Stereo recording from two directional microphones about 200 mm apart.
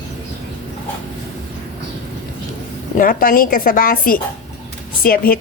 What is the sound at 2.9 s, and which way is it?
A woman's voice, 45° left (ahead or behind).